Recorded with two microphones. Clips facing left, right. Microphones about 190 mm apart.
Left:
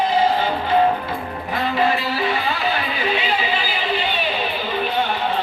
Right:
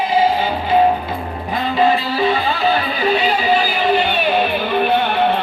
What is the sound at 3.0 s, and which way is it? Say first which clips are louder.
Music: right 6 dB; 40° right (ahead or behind).